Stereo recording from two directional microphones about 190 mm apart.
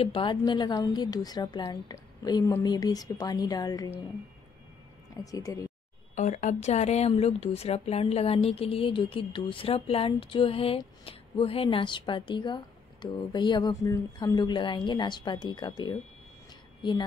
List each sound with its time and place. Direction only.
0.0 s speech: 25° left (ahead or behind)
5.1 s speech: 20° left (ahead or behind)
6.1 s speech: 40° left (ahead or behind); by 16.0 s 25° left (ahead or behind)